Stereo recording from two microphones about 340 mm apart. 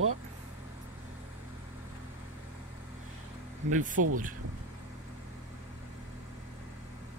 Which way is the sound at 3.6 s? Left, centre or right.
Right.